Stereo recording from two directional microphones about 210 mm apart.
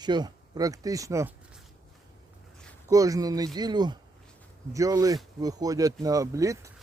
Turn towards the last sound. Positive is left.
turn(degrees=-15)  # may be behind; listen again after turning